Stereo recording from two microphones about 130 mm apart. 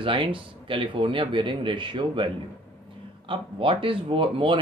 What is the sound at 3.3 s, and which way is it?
Speech, 40° right (ahead or behind).